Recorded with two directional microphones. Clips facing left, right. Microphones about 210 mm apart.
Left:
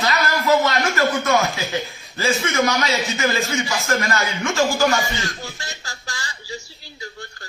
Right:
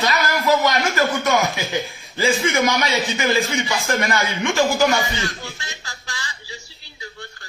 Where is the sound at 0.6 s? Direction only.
15° right (ahead or behind).